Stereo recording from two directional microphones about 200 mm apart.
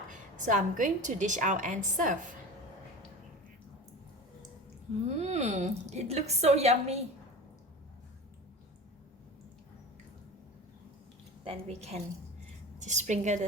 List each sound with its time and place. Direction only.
0.1 s a woman's voice: 40° right (ahead or behind)
5.0 s a woman's voice: 35° right (ahead or behind)
11.4 s a woman's voice: 30° right (ahead or behind)